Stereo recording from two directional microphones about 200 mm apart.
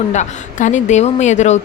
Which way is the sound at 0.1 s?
35° left (ahead or behind).